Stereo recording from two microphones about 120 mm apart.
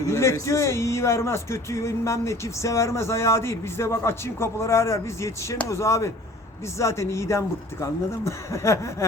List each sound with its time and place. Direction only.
0.0 s speech: 25° left (ahead or behind)